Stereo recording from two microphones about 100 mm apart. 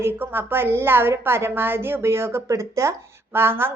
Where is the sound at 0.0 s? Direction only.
20° right (ahead or behind).